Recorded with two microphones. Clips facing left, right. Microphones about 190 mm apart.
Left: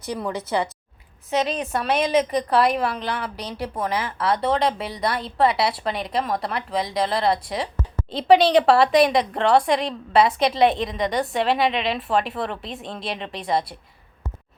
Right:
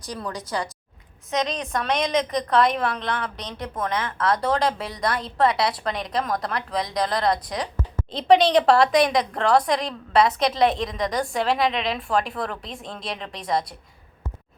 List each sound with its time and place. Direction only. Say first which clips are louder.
0.2 s a woman's voice: left 4 dB; 25° left (ahead or behind)
1.3 s a woman's voice: left 2 dB; 5° left (ahead or behind)